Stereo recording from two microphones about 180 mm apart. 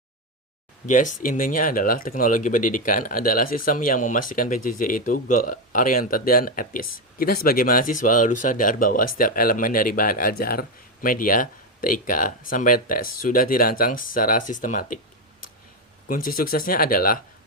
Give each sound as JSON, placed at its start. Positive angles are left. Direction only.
{"t": 0.9, "sound": "speech", "side_deg": 45}
{"t": 16.0, "sound": "speech", "side_deg": 50}